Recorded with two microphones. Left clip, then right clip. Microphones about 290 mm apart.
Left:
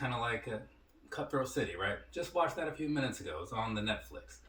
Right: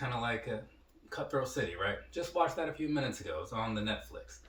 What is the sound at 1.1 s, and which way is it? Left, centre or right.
Speech, centre.